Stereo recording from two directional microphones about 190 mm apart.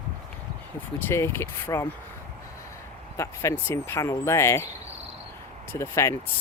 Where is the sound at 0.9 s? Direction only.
10° left (ahead or behind).